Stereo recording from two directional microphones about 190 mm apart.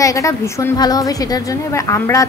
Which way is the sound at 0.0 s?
15° left (ahead or behind).